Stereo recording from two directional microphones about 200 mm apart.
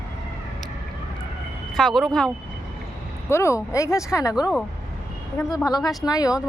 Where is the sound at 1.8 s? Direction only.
Centre (ahead or behind).